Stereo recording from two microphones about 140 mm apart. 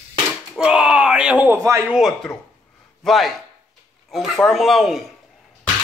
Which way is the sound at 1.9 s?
Centre (ahead or behind).